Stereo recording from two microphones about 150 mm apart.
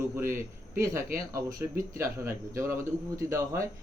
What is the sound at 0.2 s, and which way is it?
Speech, 15° right (ahead or behind).